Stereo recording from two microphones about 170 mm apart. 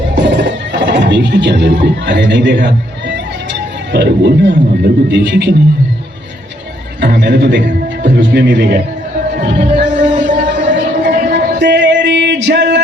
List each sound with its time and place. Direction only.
0.2 s a sound: 90° right
3.9 s a man's voice: 85° right
7.0 s a man's voice: 65° right (ahead or behind); by 8.8 s 85° right
9.3 s music: 60° right (ahead or behind)
11.5 s music: 90° right